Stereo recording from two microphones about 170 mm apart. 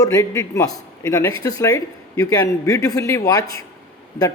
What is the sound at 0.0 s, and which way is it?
A man's voice, 20° left (ahead or behind).